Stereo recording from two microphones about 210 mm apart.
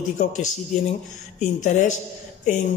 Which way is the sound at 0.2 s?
35° left (ahead or behind).